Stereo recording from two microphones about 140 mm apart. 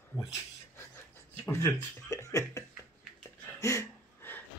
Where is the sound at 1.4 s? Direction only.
20° left (ahead or behind).